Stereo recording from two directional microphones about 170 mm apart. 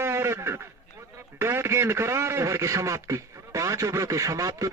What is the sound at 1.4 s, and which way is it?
A man's voice, 15° right (ahead or behind).